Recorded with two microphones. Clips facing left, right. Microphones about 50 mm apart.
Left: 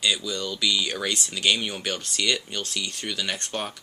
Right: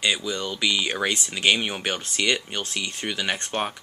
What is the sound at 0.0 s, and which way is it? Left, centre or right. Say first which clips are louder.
Speech: right 1 dB; right.